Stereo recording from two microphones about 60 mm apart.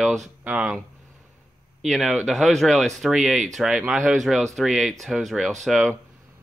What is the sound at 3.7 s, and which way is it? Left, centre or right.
Speech, centre.